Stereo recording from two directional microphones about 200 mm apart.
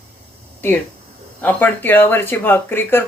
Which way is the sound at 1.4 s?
10° left (ahead or behind).